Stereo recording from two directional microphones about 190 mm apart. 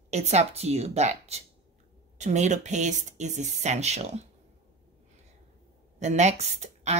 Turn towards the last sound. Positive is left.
turn(degrees=-35)  # may be behind; listen again after turning